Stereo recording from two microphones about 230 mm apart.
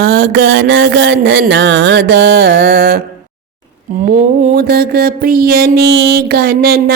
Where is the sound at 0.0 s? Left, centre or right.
Right.